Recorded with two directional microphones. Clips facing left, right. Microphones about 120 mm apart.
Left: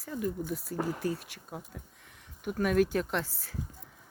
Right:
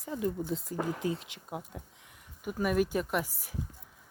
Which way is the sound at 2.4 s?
5° right (ahead or behind).